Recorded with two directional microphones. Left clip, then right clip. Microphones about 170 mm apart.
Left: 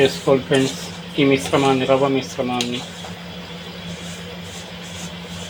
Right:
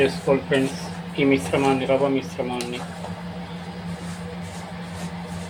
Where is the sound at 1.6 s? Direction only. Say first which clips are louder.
Left 4 dB; 30° left (ahead or behind).